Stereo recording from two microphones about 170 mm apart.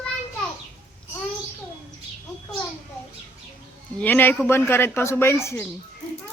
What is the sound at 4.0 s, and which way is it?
Speech, 10° left (ahead or behind).